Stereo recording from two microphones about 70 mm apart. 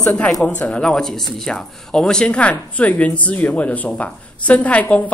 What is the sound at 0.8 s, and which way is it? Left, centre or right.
A woman's voice, centre.